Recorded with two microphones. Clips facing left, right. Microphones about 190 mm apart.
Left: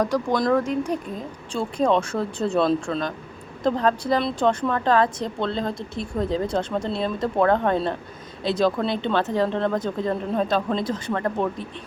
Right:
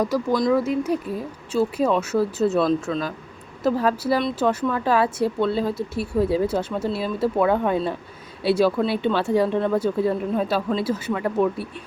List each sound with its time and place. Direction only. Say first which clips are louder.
0.0 s a woman's voice: right 1 dB; 5° right (ahead or behind)